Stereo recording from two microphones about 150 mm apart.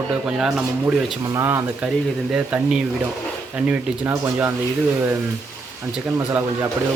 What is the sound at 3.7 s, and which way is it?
Speech, 15° right (ahead or behind).